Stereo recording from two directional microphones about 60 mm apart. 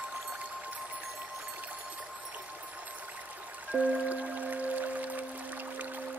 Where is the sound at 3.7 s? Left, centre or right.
Right.